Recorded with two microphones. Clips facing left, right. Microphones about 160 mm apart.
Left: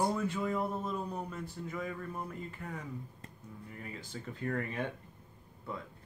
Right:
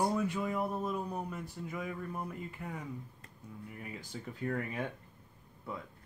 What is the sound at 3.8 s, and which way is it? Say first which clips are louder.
Speech: left 1 dB; 10° right (ahead or behind).